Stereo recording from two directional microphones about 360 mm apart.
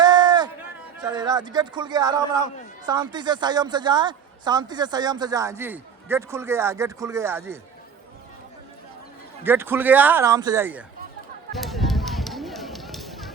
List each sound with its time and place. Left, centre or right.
0.0 s a sound: centre
0.9 s a man's voice: centre
9.4 s a man's voice: centre
11.5 s run: centre